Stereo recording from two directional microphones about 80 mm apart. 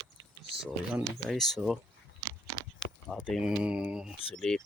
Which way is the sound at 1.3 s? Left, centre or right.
Centre.